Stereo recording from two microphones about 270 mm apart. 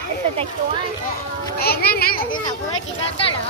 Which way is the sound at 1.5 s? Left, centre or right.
Left.